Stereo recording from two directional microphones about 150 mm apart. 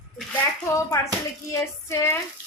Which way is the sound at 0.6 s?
20° left (ahead or behind).